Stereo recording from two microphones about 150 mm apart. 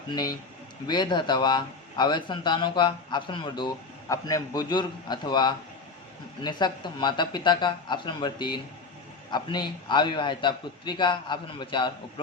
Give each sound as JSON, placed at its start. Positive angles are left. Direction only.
{"t": 0.1, "sound": "a man's voice", "side_deg": 25}